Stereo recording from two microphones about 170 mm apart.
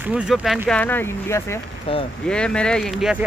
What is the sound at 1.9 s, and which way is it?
Speech, 35° left (ahead or behind).